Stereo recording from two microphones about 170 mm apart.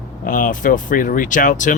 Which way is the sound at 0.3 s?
55° left (ahead or behind).